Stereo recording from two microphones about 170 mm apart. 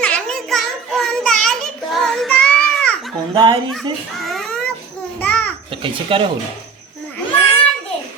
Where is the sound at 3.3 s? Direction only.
25° right (ahead or behind).